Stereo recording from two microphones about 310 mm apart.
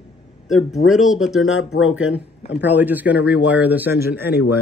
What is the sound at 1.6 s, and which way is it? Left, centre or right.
Speech, left.